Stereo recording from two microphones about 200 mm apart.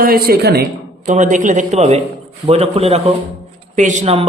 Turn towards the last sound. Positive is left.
turn(degrees=-35)  # may be behind; listen again after turning